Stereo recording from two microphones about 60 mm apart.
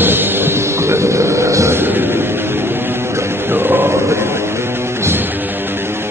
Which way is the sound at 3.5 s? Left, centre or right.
Right.